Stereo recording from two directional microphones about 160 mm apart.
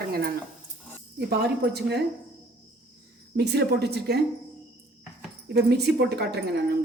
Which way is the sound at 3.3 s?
90° right.